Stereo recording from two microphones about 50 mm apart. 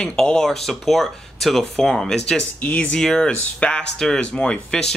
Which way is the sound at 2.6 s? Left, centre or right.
Left.